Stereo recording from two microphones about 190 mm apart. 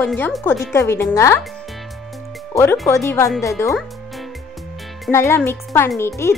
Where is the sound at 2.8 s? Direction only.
15° left (ahead or behind).